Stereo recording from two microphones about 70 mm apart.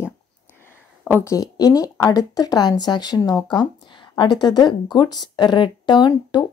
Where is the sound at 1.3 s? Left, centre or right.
Left.